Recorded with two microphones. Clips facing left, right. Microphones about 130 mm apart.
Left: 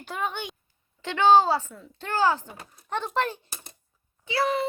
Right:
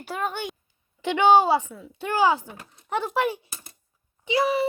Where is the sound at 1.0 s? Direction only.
15° right (ahead or behind).